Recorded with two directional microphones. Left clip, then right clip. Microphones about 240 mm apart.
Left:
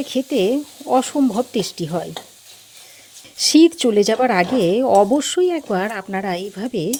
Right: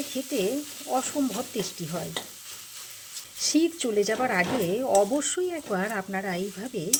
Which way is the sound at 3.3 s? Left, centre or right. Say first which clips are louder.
Left 12 dB; left.